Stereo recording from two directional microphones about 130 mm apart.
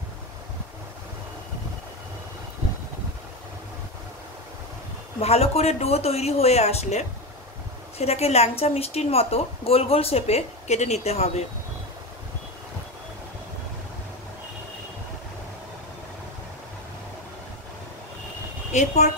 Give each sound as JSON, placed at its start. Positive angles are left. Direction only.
{"t": 5.2, "sound": "a woman's voice", "side_deg": 50}
{"t": 18.7, "sound": "a woman's voice", "side_deg": 65}